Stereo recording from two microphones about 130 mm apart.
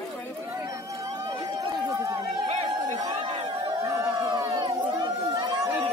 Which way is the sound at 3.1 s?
45° right (ahead or behind).